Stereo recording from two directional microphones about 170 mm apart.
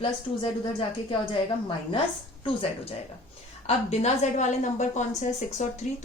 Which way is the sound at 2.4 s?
30° left (ahead or behind).